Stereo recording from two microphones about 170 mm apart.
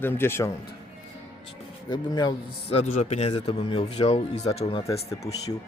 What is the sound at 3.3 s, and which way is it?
A man's voice, 30° left (ahead or behind).